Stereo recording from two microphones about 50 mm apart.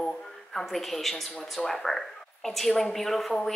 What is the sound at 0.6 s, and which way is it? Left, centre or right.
A woman's voice, centre.